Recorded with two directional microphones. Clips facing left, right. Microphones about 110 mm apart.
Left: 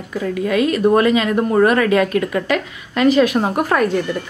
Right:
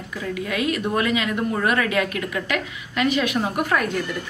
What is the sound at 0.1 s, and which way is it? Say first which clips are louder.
A woman's voice: left 8 dB; 40° left (ahead or behind).